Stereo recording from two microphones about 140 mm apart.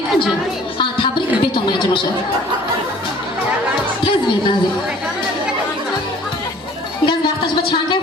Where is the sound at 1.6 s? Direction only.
35° left (ahead or behind).